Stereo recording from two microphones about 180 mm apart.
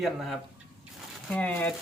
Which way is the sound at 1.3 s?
10° left (ahead or behind).